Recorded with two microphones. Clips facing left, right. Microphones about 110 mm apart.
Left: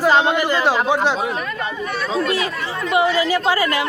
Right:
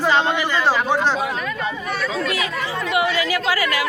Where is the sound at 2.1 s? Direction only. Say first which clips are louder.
Left 3 dB; 30° left (ahead or behind).